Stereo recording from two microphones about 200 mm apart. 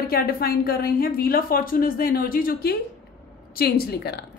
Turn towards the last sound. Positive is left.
turn(degrees=55)  # may be behind; listen again after turning